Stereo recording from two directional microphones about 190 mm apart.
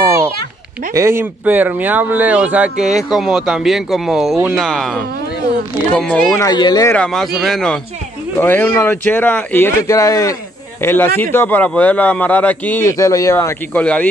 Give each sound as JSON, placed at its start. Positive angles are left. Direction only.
{"t": 0.0, "sound": "children playing", "side_deg": -15}
{"t": 0.9, "sound": "speech", "side_deg": -15}
{"t": 6.4, "sound": "speech", "side_deg": 20}
{"t": 7.0, "sound": "speech", "side_deg": 0}